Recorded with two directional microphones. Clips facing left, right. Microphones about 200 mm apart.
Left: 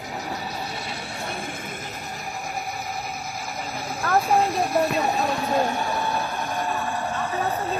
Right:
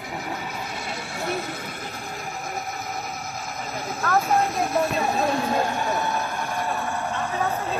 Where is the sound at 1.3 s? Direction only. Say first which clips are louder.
Right 6 dB; 30° left (ahead or behind).